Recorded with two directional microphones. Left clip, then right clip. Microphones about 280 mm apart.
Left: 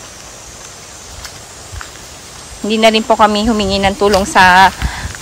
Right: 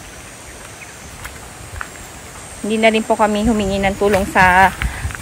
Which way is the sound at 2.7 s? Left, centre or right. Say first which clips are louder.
Left 4 dB; centre.